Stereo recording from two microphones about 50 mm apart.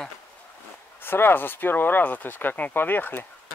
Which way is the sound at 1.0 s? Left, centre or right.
Left.